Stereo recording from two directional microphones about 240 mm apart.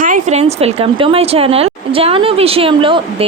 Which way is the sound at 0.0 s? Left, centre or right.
Right.